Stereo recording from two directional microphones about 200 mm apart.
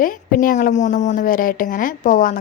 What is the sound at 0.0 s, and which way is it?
A woman's voice, 45° left (ahead or behind).